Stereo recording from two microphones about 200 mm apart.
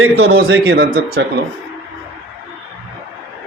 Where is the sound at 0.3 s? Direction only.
50° right (ahead or behind).